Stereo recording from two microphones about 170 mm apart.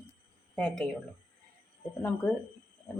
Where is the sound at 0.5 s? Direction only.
5° left (ahead or behind).